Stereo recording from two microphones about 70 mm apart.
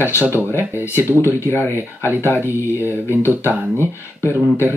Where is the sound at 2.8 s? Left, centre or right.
Left.